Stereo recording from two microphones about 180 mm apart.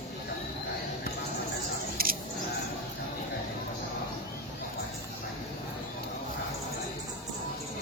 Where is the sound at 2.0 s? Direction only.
55° right (ahead or behind).